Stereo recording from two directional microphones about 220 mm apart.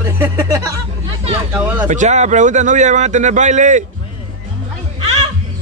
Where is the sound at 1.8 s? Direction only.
35° right (ahead or behind).